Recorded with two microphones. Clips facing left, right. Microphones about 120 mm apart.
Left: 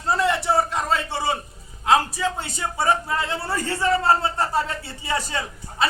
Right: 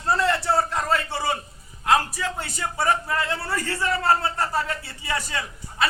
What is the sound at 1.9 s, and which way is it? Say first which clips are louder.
A man's voice: left 2 dB; 20° left (ahead or behind).